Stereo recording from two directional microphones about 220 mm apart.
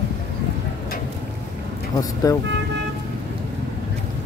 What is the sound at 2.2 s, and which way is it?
Speech, 15° left (ahead or behind).